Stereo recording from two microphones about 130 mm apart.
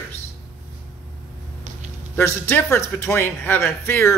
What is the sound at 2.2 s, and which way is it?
A man's voice, 20° left (ahead or behind).